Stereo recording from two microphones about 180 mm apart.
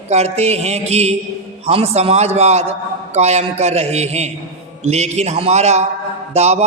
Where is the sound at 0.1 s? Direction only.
35° right (ahead or behind).